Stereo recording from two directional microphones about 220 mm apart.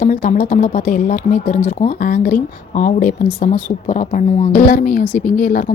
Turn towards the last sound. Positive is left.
turn(degrees=35)  # may be behind; listen again after turning